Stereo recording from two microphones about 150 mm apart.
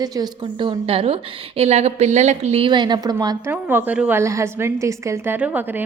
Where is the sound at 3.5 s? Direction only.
15° right (ahead or behind).